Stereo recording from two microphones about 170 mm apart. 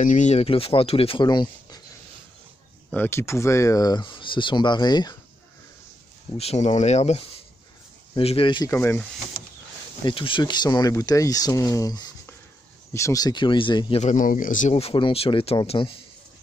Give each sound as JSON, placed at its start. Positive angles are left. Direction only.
{"t": 0.0, "sound": "speech", "side_deg": 45}
{"t": 2.9, "sound": "speech", "side_deg": 15}
{"t": 6.3, "sound": "speech", "side_deg": 40}
{"t": 8.6, "sound": "speech", "side_deg": 15}
{"t": 10.0, "sound": "speech", "side_deg": 30}
{"t": 14.0, "sound": "speech", "side_deg": 50}